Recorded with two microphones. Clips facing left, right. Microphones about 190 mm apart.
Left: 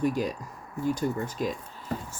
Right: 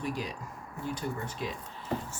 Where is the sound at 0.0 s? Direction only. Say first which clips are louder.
Left 8 dB; 45° left (ahead or behind).